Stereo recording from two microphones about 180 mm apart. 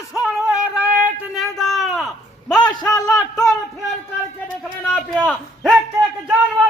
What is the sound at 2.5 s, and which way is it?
Speech, 25° left (ahead or behind).